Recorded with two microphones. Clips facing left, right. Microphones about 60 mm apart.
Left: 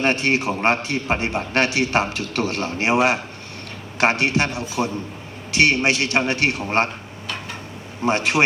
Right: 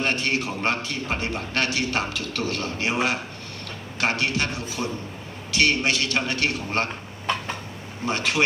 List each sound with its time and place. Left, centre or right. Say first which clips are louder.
0.0 s a man's voice: left 5 dB; left
8.0 s a man's voice: left 5 dB; left